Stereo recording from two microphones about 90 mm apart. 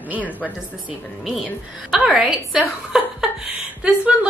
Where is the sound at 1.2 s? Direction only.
5° right (ahead or behind).